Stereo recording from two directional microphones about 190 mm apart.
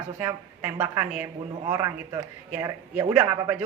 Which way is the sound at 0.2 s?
10° right (ahead or behind).